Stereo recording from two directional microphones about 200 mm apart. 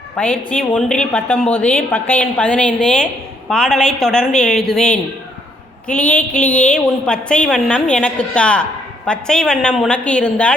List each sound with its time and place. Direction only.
0.2 s a woman's voice: 5° left (ahead or behind)
6.1 s a woman's voice: 5° left (ahead or behind)
6.4 s speech: 35° left (ahead or behind)
6.7 s a woman's voice: 5° left (ahead or behind)